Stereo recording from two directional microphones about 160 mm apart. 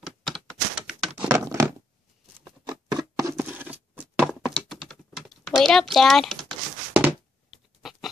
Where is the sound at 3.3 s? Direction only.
10° right (ahead or behind).